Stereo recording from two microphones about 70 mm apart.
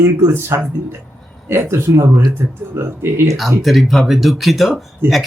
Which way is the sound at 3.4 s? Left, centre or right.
Centre.